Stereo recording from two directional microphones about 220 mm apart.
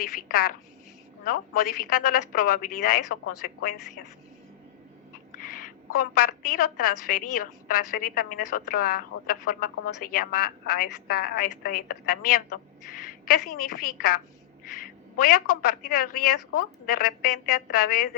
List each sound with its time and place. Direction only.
0.0 s a woman's voice: 40° left (ahead or behind)
5.3 s a woman's voice: 40° left (ahead or behind)
15.2 s a woman's voice: 40° left (ahead or behind)